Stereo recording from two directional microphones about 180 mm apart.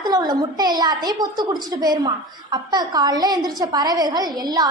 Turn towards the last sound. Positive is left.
turn(degrees=-20)  # may be behind; listen again after turning